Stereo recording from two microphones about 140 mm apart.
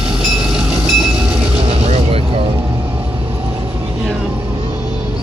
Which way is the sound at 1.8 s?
40° right (ahead or behind).